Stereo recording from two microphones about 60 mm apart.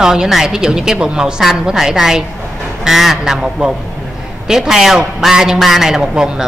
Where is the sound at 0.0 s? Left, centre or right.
Centre.